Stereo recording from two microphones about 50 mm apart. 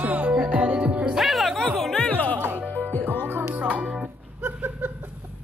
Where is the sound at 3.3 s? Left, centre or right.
Right.